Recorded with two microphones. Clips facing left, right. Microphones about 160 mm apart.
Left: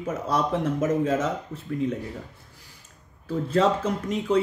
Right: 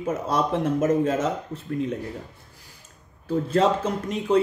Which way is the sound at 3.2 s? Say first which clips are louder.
Right 1 dB; 20° right (ahead or behind).